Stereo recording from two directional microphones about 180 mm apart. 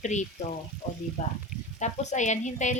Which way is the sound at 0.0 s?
40° left (ahead or behind).